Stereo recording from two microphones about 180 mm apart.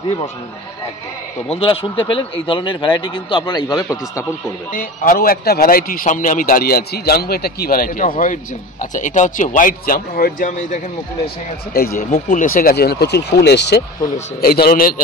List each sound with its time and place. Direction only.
1.5 s speech: 30° left (ahead or behind)
4.7 s a man's voice: 50° left (ahead or behind)
12.0 s speech: 50° left (ahead or behind); by 14.1 s 70° left (ahead or behind)
14.4 s speech: 55° left (ahead or behind)